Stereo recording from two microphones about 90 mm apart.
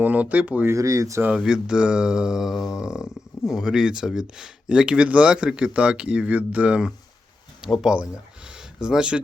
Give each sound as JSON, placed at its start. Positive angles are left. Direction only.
{"t": 0.0, "sound": "speech", "side_deg": -15}
{"t": 0.7, "sound": "speech", "side_deg": -40}
{"t": 1.2, "sound": "speech", "side_deg": -10}
{"t": 8.4, "sound": "a sound", "side_deg": -10}